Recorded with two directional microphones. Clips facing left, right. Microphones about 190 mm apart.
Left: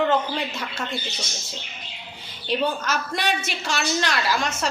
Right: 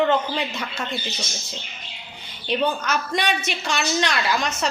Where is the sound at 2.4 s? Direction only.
5° left (ahead or behind).